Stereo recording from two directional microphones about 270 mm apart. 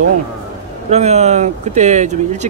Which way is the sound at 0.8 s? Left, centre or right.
Right.